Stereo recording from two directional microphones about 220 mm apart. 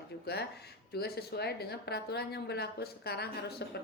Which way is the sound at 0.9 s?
45° left (ahead or behind).